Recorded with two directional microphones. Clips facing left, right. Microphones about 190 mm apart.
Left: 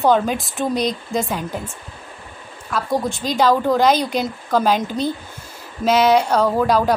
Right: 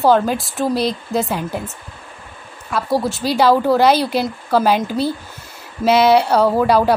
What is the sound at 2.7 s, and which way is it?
A woman's voice, 10° right (ahead or behind).